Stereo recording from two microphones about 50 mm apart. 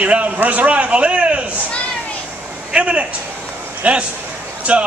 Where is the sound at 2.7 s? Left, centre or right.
Right.